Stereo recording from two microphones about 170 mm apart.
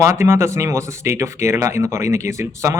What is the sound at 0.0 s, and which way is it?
Speech, 15° right (ahead or behind).